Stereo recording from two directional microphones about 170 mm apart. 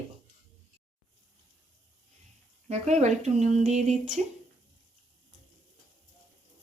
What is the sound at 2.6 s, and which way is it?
Speech, 40° right (ahead or behind).